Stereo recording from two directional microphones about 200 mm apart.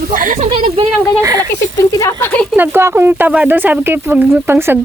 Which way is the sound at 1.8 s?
15° left (ahead or behind).